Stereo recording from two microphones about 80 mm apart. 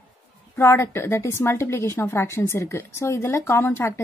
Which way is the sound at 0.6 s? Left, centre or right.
Left.